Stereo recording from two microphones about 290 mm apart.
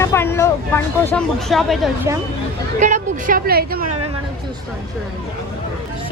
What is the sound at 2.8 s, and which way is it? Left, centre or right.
Speech, right.